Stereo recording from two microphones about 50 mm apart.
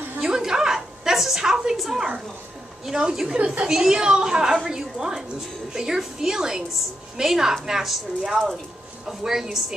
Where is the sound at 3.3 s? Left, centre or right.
Right; by 9.7 s centre.